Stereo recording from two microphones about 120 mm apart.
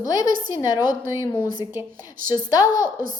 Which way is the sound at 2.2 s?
30° left (ahead or behind).